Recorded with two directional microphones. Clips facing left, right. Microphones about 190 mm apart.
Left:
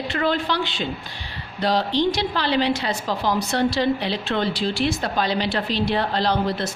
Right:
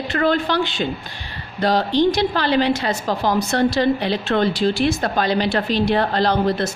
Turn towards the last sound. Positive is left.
turn(degrees=-50)  # may be behind; listen again after turning